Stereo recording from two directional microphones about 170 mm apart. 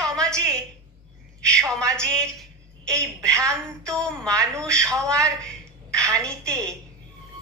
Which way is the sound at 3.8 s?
5° left (ahead or behind).